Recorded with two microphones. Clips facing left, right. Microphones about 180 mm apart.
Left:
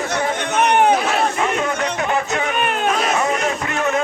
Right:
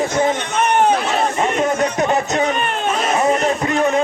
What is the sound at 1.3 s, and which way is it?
Music, 35° right (ahead or behind).